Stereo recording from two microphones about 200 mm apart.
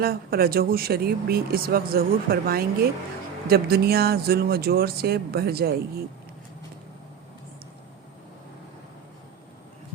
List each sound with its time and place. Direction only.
0.0 s speech: 50° right (ahead or behind)